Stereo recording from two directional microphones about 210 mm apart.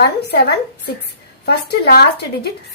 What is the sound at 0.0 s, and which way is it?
A woman's voice, 50° left (ahead or behind).